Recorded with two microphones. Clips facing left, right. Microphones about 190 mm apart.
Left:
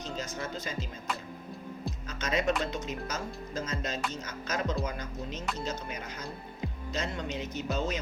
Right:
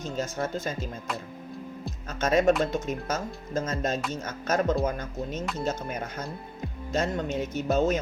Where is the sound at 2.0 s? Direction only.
50° right (ahead or behind).